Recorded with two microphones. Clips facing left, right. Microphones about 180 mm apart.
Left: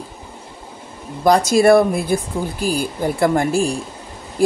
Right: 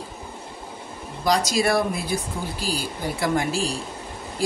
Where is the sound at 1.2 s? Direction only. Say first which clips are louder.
Left 9 dB; 55° left (ahead or behind).